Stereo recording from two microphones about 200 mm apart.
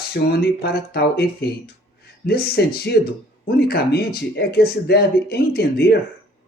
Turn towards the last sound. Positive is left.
turn(degrees=55)  # may be behind; listen again after turning